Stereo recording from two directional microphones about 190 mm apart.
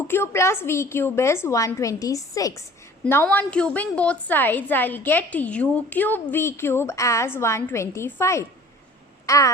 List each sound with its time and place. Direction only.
0.1 s a woman's voice: 15° left (ahead or behind)
9.2 s babbling: 15° left (ahead or behind)